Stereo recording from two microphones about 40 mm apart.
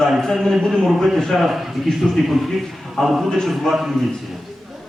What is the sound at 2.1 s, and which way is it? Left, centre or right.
Speech, centre.